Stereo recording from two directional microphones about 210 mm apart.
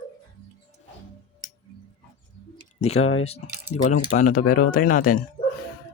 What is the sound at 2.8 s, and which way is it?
Speech, 30° left (ahead or behind).